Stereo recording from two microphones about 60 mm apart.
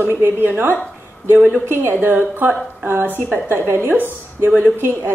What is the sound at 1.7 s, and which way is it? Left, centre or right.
A woman's voice, right.